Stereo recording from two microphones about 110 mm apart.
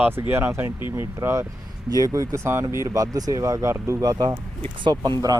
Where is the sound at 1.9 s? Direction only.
35° right (ahead or behind).